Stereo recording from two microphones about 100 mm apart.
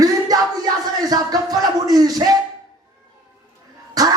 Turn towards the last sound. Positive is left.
turn(degrees=-40)  # may be behind; listen again after turning